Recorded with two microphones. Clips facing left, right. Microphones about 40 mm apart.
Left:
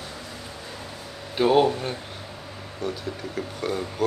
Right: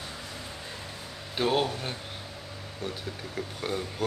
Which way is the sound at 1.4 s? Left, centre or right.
Centre.